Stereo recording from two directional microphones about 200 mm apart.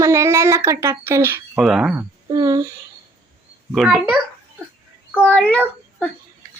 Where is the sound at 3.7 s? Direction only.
Centre (ahead or behind).